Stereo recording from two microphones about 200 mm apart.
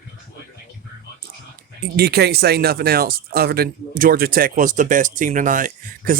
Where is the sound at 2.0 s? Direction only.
50° right (ahead or behind).